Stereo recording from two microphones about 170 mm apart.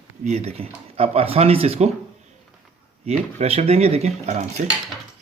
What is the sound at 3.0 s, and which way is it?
Speech, 40° right (ahead or behind).